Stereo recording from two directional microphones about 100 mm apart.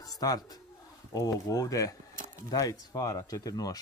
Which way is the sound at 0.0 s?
40° left (ahead or behind).